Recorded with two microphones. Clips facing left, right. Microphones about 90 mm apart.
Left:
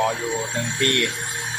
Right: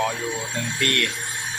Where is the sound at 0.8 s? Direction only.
30° left (ahead or behind).